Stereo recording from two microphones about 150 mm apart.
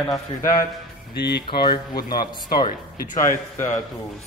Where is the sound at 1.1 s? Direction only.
90° left.